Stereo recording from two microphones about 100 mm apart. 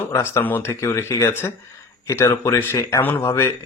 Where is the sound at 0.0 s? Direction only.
20° left (ahead or behind).